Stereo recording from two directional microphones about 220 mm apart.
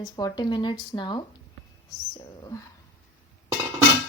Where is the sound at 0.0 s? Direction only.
20° left (ahead or behind).